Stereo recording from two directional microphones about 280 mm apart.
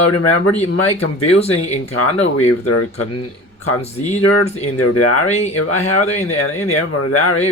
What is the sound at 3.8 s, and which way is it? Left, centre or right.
Speech, left.